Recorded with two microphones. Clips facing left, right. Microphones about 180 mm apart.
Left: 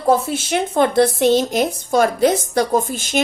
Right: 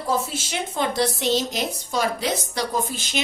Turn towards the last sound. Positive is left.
turn(degrees=50)  # may be behind; listen again after turning